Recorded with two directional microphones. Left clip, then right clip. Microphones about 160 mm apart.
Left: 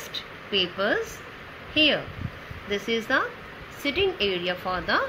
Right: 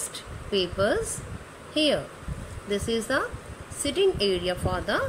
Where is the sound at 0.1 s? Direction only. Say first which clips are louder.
Left 2 dB; 85° right.